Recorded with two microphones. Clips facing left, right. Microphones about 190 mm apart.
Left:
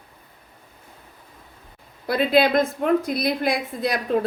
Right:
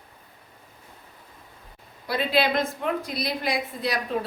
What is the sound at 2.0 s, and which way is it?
A woman's voice, 50° left (ahead or behind).